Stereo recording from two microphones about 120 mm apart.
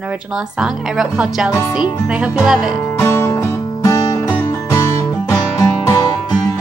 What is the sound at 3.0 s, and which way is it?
Music, 20° left (ahead or behind).